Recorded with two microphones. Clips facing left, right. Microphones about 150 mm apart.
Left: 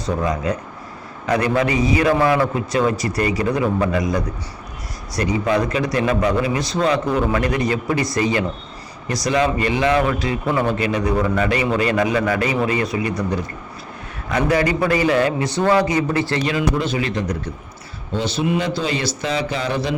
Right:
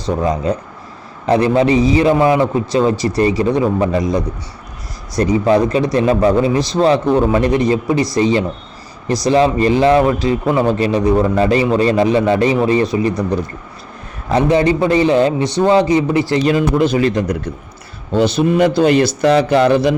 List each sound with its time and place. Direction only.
0.2 s a man's voice: 25° right (ahead or behind)
5.2 s a man's voice: 30° right (ahead or behind)
14.3 s a man's voice: 25° right (ahead or behind)
16.5 s a man's voice: 45° right (ahead or behind)
18.1 s a man's voice: 65° right (ahead or behind)
18.4 s speech: 55° right (ahead or behind)